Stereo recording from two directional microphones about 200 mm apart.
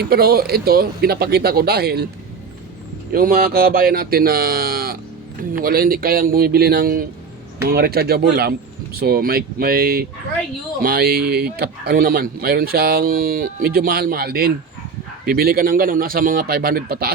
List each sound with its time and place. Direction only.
0.0 s speech: 50° right (ahead or behind)
3.1 s speech: 45° right (ahead or behind)